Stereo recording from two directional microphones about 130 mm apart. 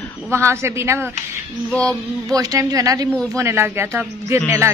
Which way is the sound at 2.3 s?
30° right (ahead or behind).